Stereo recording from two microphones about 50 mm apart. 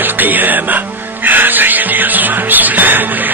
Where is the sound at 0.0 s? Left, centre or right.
Right.